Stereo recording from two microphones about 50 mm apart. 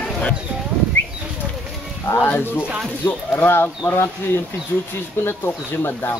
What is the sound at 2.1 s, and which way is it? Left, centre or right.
Speech, left.